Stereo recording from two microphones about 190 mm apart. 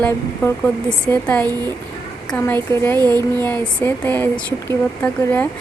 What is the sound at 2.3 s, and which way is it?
Speech, 10° left (ahead or behind).